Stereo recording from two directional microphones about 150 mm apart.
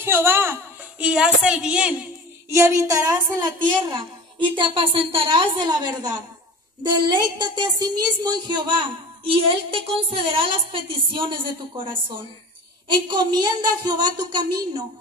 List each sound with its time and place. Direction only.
0.0 s a woman's voice: 15° right (ahead or behind)
2.5 s a woman's voice: 20° right (ahead or behind)
3.9 s a woman's voice: 35° right (ahead or behind)
7.2 s a woman's voice: 30° right (ahead or behind)